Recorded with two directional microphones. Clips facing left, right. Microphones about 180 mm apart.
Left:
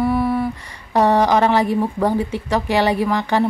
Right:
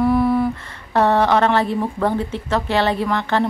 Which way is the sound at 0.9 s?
15° left (ahead or behind).